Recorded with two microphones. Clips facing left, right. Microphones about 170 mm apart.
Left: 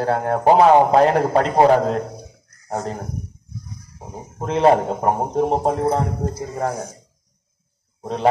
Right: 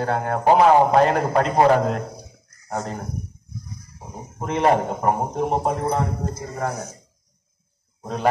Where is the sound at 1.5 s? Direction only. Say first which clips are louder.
Left 2 dB; 30° left (ahead or behind).